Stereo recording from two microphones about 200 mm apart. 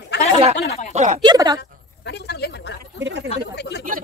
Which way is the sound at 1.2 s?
20° right (ahead or behind).